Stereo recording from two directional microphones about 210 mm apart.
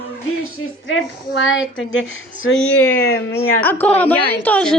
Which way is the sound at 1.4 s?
65° left (ahead or behind).